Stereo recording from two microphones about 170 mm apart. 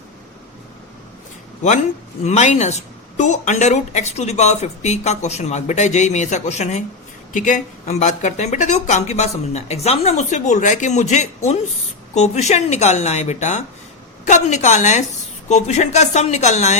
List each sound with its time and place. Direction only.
2.2 s speech: 40° left (ahead or behind)